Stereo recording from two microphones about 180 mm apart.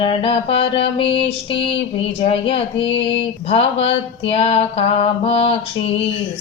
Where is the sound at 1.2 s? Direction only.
30° left (ahead or behind).